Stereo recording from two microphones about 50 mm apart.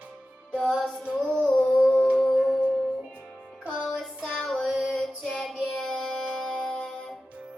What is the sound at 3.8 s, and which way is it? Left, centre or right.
Music, centre.